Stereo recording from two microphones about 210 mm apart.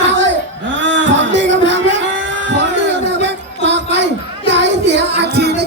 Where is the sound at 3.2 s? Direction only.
55° right (ahead or behind).